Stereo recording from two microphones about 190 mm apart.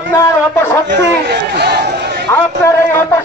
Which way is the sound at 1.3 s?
60° right (ahead or behind).